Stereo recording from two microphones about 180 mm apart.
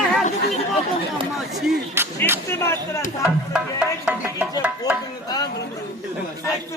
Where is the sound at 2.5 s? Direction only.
15° left (ahead or behind).